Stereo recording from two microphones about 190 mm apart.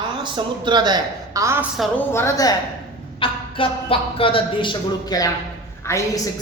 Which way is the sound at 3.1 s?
30° left (ahead or behind).